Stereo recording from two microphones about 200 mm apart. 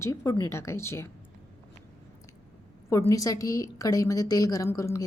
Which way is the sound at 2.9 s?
15° left (ahead or behind).